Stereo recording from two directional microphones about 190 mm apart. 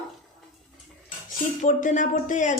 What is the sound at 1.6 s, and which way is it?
Speech, 40° left (ahead or behind).